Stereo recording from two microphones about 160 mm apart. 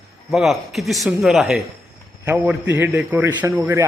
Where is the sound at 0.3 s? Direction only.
Centre (ahead or behind).